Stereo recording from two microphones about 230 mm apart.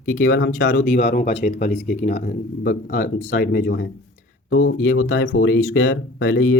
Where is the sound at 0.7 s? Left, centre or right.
Left.